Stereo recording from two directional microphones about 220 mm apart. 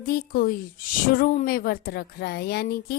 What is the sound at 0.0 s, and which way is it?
A woman's voice, 45° left (ahead or behind).